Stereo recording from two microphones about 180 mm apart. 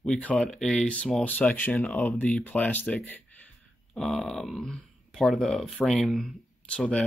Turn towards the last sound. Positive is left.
turn(degrees=5)  # may be behind; listen again after turning